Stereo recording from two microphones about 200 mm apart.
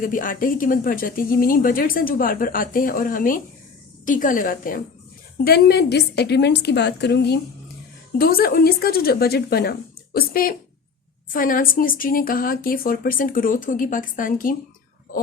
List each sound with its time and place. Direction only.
0.0 s a woman's voice: 45° left (ahead or behind)